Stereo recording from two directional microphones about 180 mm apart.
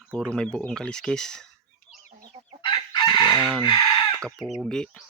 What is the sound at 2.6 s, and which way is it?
Chicken, 25° left (ahead or behind).